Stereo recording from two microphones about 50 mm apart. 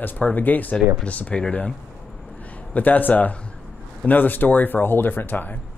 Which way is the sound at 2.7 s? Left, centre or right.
Left.